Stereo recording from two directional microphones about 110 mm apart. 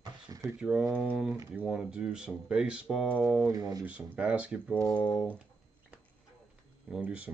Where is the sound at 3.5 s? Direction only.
30° right (ahead or behind).